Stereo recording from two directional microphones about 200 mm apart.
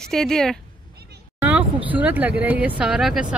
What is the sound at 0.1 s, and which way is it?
Speech, 5° left (ahead or behind).